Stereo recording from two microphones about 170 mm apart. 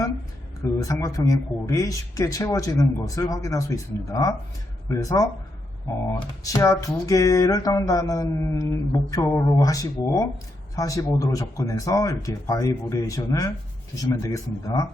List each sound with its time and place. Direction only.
0.6 s speech: 20° left (ahead or behind)